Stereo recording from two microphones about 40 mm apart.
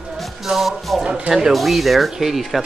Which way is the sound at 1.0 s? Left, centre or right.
Right.